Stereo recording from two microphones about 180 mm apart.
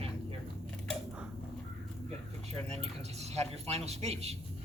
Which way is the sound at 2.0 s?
35° right (ahead or behind).